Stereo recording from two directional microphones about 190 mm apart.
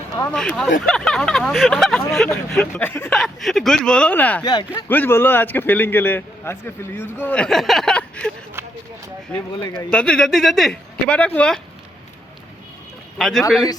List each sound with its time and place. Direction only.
0.3 s speech: 5° left (ahead or behind)
4.4 s speech: 20° left (ahead or behind)
4.9 s a man's voice: 10° left (ahead or behind)
9.6 s speech: 20° left (ahead or behind)
9.9 s speech: 5° left (ahead or behind)
13.1 s speech: centre (ahead or behind)